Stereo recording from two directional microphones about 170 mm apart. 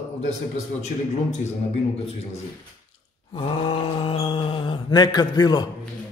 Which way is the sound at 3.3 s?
30° left (ahead or behind).